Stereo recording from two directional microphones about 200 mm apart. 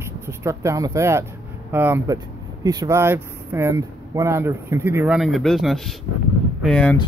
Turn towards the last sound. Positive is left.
turn(degrees=5)  # may be behind; listen again after turning